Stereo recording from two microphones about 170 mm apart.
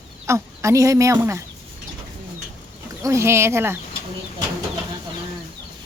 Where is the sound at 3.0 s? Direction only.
15° right (ahead or behind).